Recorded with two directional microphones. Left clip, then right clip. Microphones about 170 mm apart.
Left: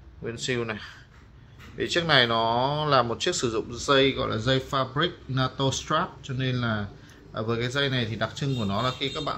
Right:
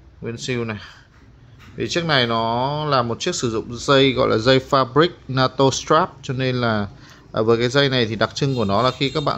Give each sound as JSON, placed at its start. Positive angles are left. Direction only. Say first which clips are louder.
{"t": 0.2, "sound": "speech", "louder": "right 4 dB", "side_deg": -10}